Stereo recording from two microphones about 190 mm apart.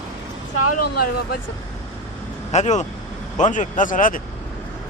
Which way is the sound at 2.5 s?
40° left (ahead or behind).